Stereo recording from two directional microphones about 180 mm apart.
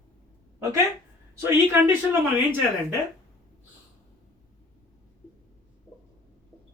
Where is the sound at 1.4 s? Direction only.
15° right (ahead or behind).